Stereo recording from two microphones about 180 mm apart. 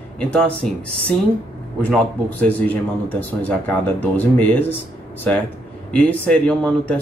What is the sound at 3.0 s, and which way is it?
Speech, 10° left (ahead or behind).